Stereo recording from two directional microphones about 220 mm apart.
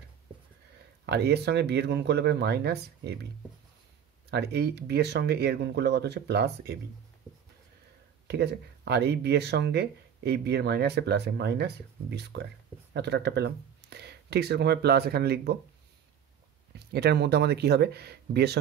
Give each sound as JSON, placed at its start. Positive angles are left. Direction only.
{"t": 1.0, "sound": "speech", "side_deg": -50}
{"t": 4.3, "sound": "speech", "side_deg": -50}
{"t": 8.3, "sound": "speech", "side_deg": -50}
{"t": 16.7, "sound": "speech", "side_deg": -45}